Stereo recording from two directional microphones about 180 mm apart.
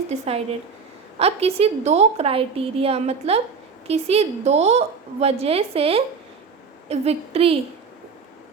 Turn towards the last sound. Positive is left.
turn(degrees=-35)  # may be behind; listen again after turning